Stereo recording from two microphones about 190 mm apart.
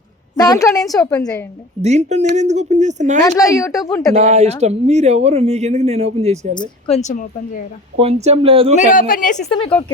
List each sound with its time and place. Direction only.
0.3 s a woman's voice: 20° left (ahead or behind)
1.8 s speech: 35° right (ahead or behind)
3.7 s speech: centre (ahead or behind)
4.1 s speech: 35° right (ahead or behind)
6.5 s a woman's voice: 25° left (ahead or behind); by 7.6 s 45° left (ahead or behind)
7.9 s speech: 35° right (ahead or behind)
8.8 s a woman's voice: 45° left (ahead or behind)
9.5 s speech: 25° left (ahead or behind)